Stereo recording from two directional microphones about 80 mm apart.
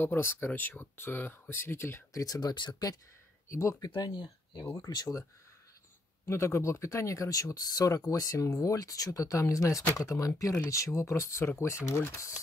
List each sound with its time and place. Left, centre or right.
0.0 s speech: left
2.1 s speech: left
2.5 s speech: left
3.4 s speech: left
3.9 s speech: left
4.8 s speech: left
6.2 s speech: left